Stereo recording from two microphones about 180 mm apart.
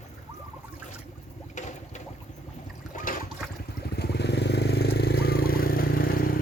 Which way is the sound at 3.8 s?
65° left (ahead or behind).